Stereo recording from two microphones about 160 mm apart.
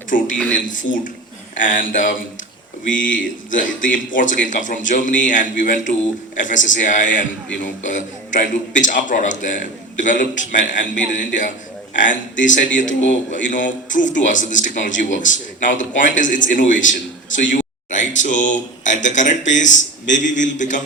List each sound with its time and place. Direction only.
0.1 s a man's voice: 55° left (ahead or behind)